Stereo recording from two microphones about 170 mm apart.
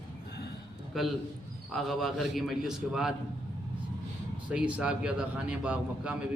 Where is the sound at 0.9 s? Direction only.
Centre (ahead or behind).